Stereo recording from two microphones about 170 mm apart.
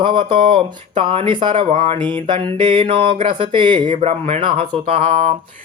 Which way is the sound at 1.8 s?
25° right (ahead or behind).